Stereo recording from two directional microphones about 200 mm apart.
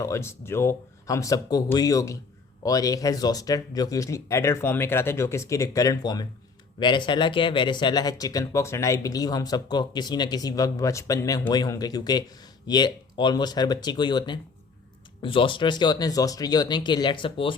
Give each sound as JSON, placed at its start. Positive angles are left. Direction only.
{"t": 0.0, "sound": "speech", "side_deg": 15}